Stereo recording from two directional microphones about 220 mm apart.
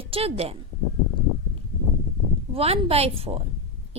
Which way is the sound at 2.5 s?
25° right (ahead or behind).